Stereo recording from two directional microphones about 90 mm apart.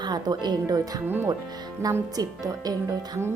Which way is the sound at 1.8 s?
30° right (ahead or behind).